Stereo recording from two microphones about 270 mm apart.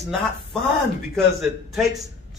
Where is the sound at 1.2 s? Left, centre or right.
Centre.